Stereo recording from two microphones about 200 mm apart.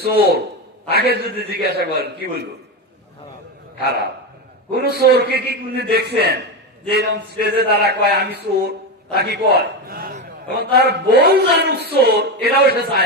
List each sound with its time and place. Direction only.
0.0 s a man's voice: 55° right (ahead or behind)
4.7 s a man's voice: 55° right (ahead or behind)